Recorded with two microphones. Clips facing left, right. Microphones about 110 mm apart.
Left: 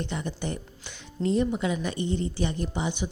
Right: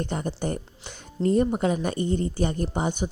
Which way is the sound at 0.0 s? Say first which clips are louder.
Right 3 dB; 45° right (ahead or behind).